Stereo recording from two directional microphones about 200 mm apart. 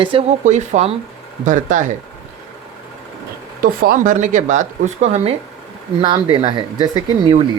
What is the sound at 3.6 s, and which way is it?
Speech, 45° right (ahead or behind).